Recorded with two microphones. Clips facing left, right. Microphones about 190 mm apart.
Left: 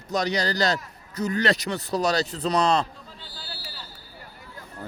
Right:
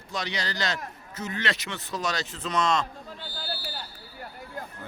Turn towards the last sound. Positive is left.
turn(degrees=-55)  # may be behind; listen again after turning